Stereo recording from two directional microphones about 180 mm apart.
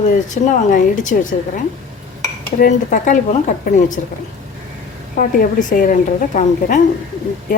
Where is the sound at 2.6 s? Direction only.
45° left (ahead or behind).